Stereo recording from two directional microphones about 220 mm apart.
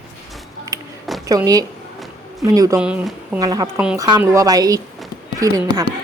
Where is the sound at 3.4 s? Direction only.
15° right (ahead or behind).